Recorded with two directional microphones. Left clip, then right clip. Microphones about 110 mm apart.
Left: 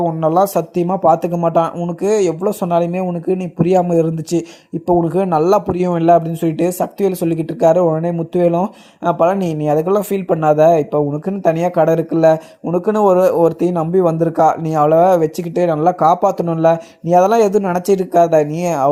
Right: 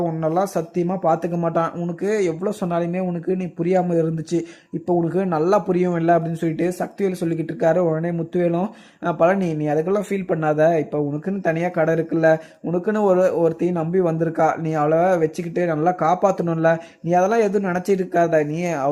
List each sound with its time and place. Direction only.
0.0 s speech: 35° left (ahead or behind)
1.4 s speech: 20° left (ahead or behind)
2.0 s speech: 30° left (ahead or behind)